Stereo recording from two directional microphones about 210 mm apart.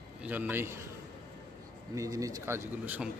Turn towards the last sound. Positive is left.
turn(degrees=-10)  # may be behind; listen again after turning